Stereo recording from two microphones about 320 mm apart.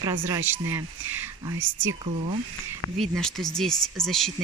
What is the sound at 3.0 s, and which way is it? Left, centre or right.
Speech, centre.